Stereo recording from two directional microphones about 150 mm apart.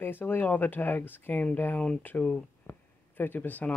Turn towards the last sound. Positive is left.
turn(degrees=10)  # may be behind; listen again after turning